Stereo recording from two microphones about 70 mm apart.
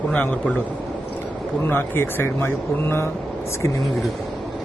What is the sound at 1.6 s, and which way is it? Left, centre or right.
Speech, left.